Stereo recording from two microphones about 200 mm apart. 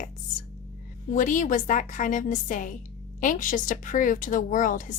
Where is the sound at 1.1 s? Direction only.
40° left (ahead or behind).